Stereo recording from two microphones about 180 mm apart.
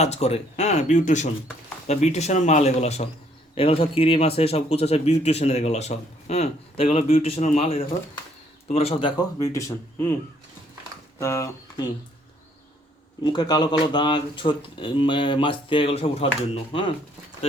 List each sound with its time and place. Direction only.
0.0 s a man's voice: 35° left (ahead or behind); by 10.2 s 15° left (ahead or behind)
11.2 s speech: 15° left (ahead or behind)
13.2 s speech: 25° left (ahead or behind)